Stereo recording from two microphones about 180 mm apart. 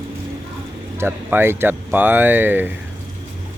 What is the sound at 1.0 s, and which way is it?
Speech, 10° right (ahead or behind).